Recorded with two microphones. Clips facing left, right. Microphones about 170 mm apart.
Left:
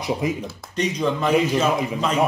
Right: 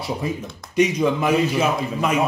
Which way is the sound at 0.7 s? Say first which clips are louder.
Right 4 dB; 10° right (ahead or behind).